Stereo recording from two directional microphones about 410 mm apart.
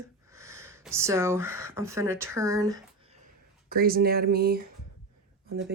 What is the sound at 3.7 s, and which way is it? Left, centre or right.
Speech, right.